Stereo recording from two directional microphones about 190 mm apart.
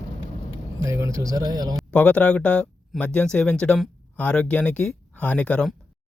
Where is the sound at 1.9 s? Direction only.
5° left (ahead or behind).